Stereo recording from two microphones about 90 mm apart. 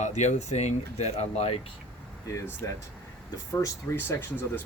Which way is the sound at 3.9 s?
25° left (ahead or behind).